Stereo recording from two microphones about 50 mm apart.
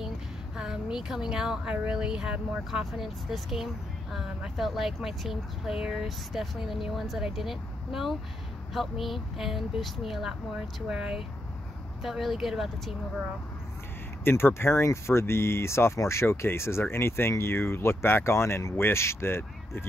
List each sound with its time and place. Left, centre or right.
0.6 s a woman's voice: centre
2.7 s speech: centre
12.0 s speech: centre
14.2 s speech: left
18.8 s speech: left